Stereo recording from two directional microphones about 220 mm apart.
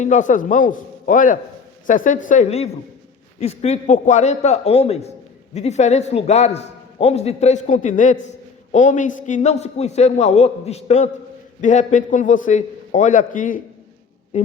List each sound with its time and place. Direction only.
0.0 s a man's voice: 35° left (ahead or behind)